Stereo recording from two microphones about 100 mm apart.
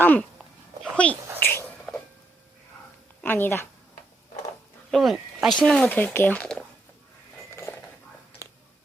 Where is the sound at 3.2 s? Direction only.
20° left (ahead or behind).